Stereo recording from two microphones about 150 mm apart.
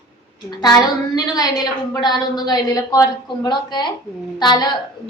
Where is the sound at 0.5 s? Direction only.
25° left (ahead or behind).